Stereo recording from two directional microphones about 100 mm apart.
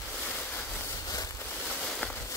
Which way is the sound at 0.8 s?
35° left (ahead or behind).